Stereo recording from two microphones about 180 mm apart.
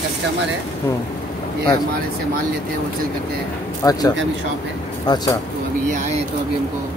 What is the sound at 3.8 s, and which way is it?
Speech, 20° left (ahead or behind).